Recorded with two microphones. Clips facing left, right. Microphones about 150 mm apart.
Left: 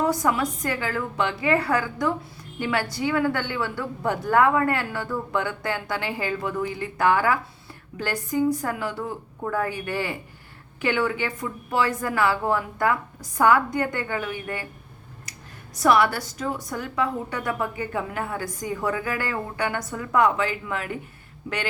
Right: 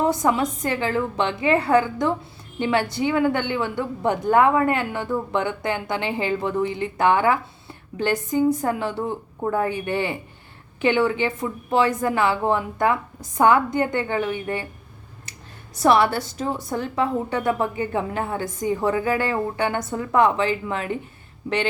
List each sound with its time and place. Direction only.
0.0 s a woman's voice: 25° right (ahead or behind)